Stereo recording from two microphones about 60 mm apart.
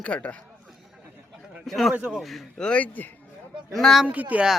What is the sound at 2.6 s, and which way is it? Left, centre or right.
Speech, centre.